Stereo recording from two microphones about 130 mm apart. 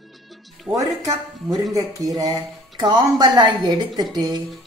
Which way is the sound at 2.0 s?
25° right (ahead or behind).